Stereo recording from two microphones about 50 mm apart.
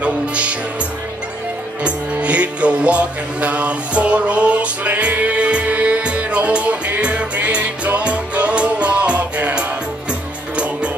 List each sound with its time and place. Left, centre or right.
0.0 s music: right
1.8 s music: right